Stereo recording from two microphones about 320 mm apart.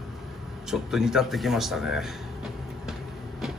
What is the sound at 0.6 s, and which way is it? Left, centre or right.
Speech, centre.